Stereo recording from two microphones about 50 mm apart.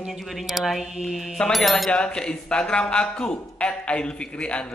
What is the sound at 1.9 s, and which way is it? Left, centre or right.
A man's voice, centre.